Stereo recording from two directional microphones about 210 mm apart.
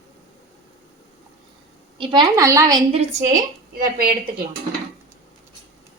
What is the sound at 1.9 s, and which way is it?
Speech, 25° right (ahead or behind).